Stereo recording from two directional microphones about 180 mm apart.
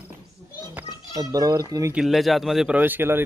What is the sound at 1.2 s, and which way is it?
Speech, 20° right (ahead or behind).